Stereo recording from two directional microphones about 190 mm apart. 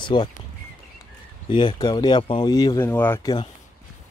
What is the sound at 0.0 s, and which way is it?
Speech, 25° left (ahead or behind).